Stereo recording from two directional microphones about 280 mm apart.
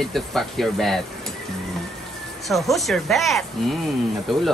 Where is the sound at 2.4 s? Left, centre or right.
Centre.